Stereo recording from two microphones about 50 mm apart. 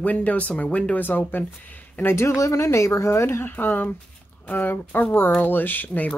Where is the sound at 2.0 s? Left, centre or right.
Left.